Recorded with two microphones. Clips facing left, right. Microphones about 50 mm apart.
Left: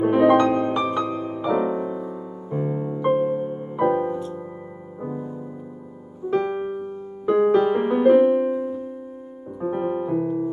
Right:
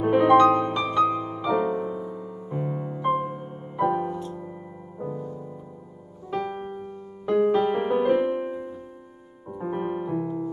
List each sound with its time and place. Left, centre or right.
0.0 s music: centre
5.0 s music: left
6.5 s music: centre
7.5 s music: centre
9.7 s piano: centre